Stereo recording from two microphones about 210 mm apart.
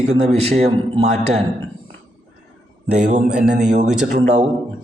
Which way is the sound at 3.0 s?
35° right (ahead or behind).